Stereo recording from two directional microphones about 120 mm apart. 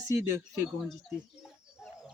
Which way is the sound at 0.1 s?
25° right (ahead or behind).